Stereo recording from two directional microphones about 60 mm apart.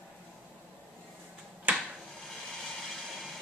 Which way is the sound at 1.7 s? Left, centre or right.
Right.